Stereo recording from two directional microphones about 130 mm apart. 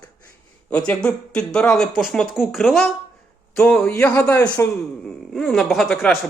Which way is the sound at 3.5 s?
10° left (ahead or behind).